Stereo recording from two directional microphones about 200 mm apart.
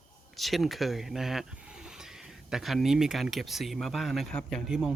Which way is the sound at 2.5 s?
Centre (ahead or behind).